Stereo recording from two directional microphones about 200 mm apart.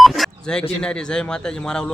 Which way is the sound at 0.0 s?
Centre (ahead or behind).